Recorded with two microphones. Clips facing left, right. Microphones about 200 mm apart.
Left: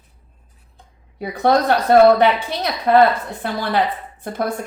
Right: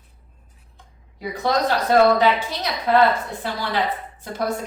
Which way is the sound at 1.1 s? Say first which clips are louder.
Left 5 dB; 60° left (ahead or behind).